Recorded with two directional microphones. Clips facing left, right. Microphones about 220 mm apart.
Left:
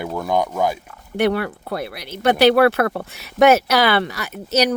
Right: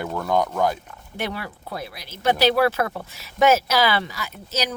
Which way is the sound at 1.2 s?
65° left (ahead or behind).